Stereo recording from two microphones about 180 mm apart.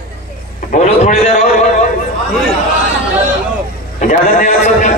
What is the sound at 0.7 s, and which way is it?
Speech, 40° left (ahead or behind).